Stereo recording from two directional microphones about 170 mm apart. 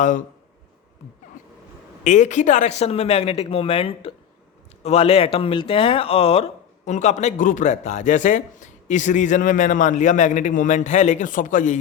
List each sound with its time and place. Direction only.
0.0 s speech: 50° left (ahead or behind)
2.0 s speech: 45° left (ahead or behind)